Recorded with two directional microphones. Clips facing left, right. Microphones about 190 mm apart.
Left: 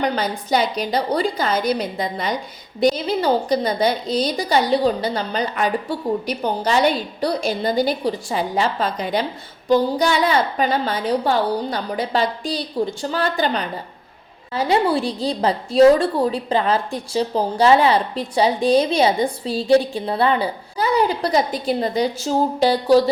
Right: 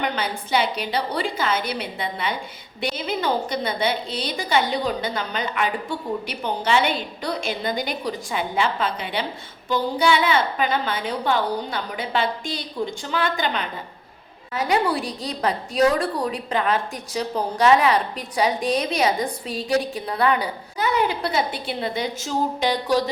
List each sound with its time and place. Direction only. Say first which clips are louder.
0.0 s a woman's voice: left 4 dB; 40° left (ahead or behind)